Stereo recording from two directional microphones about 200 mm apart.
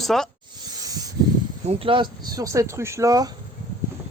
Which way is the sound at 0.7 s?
20° right (ahead or behind).